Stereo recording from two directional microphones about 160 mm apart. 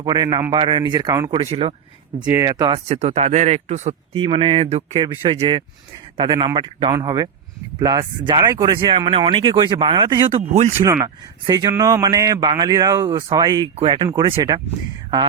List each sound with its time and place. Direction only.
0.0 s speech: 25° right (ahead or behind)
1.5 s speech: 35° right (ahead or behind)
2.2 s speech: 20° right (ahead or behind)
2.9 s speech: 40° right (ahead or behind)
10.8 s speech: 20° right (ahead or behind)